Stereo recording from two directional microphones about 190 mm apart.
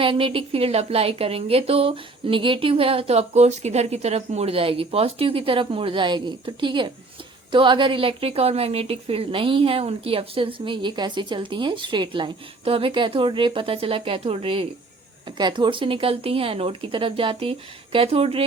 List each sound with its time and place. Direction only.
0.0 s a woman's voice: 25° right (ahead or behind)